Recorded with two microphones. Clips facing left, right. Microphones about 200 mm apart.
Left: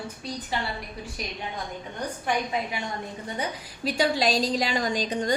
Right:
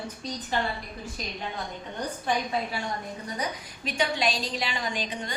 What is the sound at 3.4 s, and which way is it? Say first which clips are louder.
A woman's voice: left 4 dB; 35° left (ahead or behind).